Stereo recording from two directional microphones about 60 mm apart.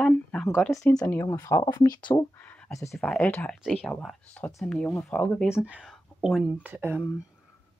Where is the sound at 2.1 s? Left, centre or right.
Left.